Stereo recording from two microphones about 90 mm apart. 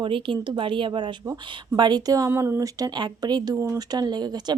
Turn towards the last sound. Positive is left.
turn(degrees=-50)  # may be behind; listen again after turning